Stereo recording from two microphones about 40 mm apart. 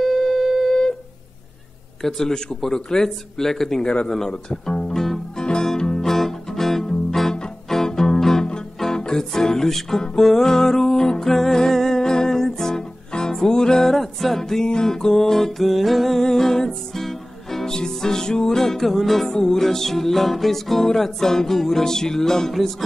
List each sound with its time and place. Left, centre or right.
0.0 s a sound: centre
0.7 s a sound: centre
2.0 s music: centre
3.8 s speech: left
4.6 s music: centre
5.4 s music: left
6.1 s music: centre
16.2 s music: centre